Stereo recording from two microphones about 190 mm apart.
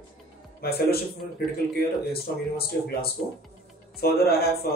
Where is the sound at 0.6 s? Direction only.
55° left (ahead or behind).